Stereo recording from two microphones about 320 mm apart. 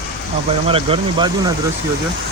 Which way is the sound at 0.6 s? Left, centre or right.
Centre.